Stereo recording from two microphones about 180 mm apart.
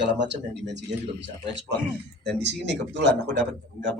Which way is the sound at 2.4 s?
70° right (ahead or behind).